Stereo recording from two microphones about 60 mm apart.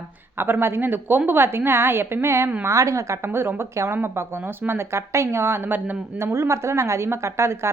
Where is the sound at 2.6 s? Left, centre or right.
Right.